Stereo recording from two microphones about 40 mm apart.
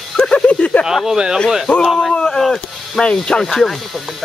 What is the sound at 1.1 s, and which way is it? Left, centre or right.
Speech, centre.